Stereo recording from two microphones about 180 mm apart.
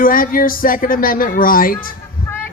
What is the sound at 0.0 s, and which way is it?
A man's voice, 50° left (ahead or behind).